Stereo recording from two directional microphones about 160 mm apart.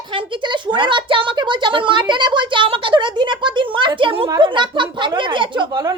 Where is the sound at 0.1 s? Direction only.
30° right (ahead or behind).